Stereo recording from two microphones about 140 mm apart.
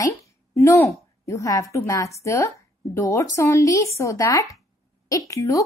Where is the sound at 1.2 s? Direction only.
20° left (ahead or behind).